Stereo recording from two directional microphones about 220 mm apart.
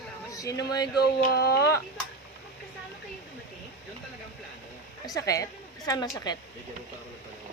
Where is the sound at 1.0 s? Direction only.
45° left (ahead or behind).